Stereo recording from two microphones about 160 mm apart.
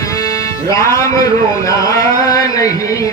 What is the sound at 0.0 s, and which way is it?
Music, 20° left (ahead or behind).